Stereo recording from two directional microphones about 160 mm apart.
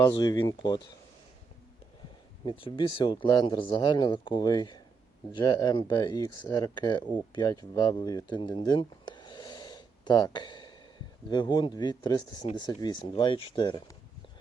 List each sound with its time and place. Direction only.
0.0 s speech: 25° left (ahead or behind)
2.4 s speech: 30° left (ahead or behind)